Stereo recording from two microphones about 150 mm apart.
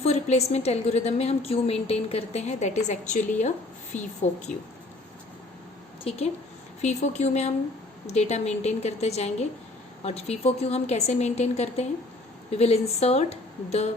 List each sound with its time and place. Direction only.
0.0 s a woman's voice: 45° left (ahead or behind)
6.1 s a woman's voice: 40° left (ahead or behind)